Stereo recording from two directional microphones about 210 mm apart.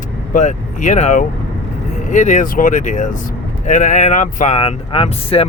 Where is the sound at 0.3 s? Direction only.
35° left (ahead or behind).